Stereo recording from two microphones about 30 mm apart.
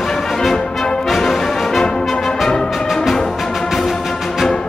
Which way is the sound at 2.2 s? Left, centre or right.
Centre.